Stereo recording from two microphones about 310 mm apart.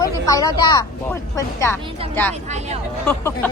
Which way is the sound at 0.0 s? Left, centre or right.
Centre.